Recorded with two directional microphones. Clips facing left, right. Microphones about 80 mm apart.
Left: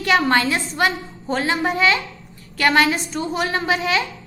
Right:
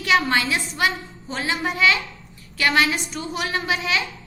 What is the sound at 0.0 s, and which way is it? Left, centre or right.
A woman's voice, left.